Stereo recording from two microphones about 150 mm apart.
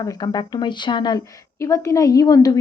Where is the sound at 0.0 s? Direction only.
30° left (ahead or behind).